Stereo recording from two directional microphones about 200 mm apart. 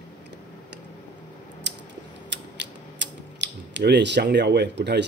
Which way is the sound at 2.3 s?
60° right (ahead or behind).